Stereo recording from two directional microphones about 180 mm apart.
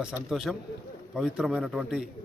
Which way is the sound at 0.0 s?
5° right (ahead or behind).